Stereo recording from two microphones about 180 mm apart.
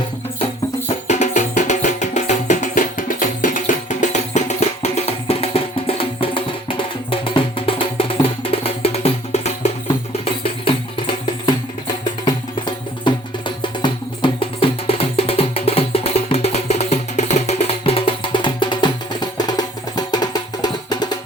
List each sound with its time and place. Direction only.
1.0 s music: 40° left (ahead or behind); by 21.2 s 25° left (ahead or behind)